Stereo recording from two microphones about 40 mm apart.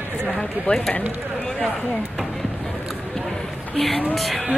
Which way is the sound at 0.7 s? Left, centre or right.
Left.